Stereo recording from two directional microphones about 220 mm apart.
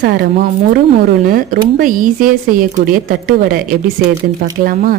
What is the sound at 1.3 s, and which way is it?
A woman's voice, 40° right (ahead or behind).